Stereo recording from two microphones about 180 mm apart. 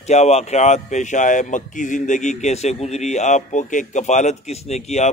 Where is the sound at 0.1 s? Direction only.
35° left (ahead or behind).